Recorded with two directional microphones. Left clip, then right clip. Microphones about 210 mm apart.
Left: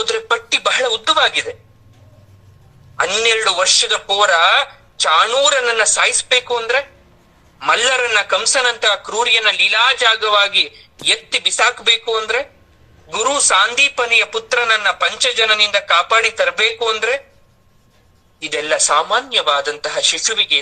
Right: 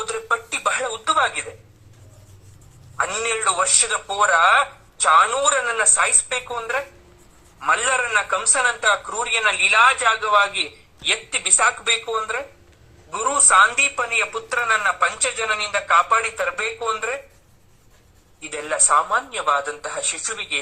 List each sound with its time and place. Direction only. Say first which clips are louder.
0.0 s a sound: left 6 dB; 20° left (ahead or behind)
3.0 s a man's voice: left 7 dB; 20° left (ahead or behind)
18.3 s a man's voice: left 7 dB; 20° left (ahead or behind)